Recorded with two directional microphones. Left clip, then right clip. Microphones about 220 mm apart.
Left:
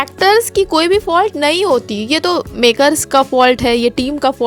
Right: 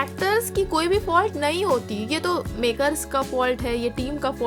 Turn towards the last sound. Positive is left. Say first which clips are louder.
# left 11 dB
turn(degrees=40)  # may be behind; listen again after turning